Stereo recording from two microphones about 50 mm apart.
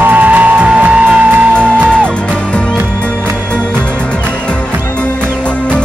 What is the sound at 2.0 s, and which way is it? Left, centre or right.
Music, left.